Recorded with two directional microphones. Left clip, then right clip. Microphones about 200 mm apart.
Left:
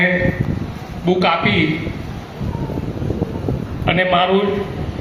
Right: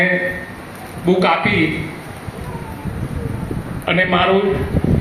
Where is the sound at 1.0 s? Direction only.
55° left (ahead or behind).